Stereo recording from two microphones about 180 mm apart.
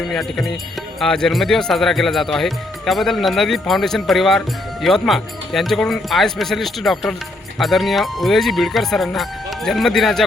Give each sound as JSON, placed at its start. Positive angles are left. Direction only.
{"t": 0.0, "sound": "a man's voice", "side_deg": 0}